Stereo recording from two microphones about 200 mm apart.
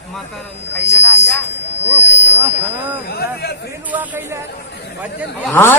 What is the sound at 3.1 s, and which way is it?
Chatter, 50° left (ahead or behind).